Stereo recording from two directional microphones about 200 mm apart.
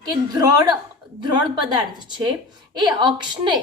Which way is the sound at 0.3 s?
15° right (ahead or behind).